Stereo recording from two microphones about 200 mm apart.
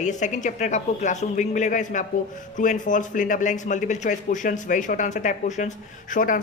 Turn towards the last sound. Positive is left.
turn(degrees=40)  # may be behind; listen again after turning